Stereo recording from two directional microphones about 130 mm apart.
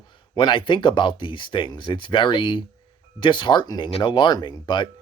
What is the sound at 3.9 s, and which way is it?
Speech, 50° left (ahead or behind).